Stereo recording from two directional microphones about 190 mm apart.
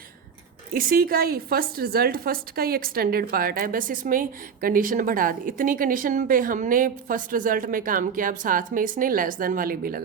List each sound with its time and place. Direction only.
0.7 s a woman's voice: 50° right (ahead or behind)